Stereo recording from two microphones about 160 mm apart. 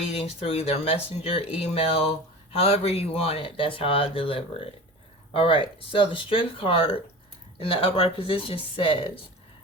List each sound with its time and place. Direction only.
0.2 s speech: 35° left (ahead or behind)